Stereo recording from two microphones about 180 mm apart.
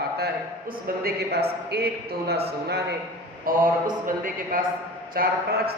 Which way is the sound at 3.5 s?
55° right (ahead or behind).